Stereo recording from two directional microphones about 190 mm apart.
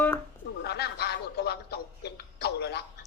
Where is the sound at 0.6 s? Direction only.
60° left (ahead or behind).